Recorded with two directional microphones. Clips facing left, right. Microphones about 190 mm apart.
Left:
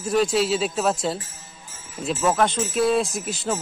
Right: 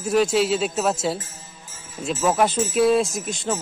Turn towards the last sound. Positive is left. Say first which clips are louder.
# even
turn(degrees=5)  # may be behind; listen again after turning